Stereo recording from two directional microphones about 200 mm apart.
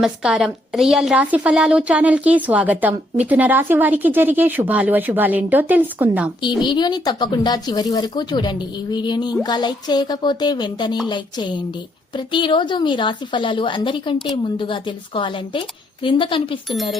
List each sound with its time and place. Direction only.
0.0 s a woman's voice: 5° right (ahead or behind)
6.6 s speech: 20° left (ahead or behind)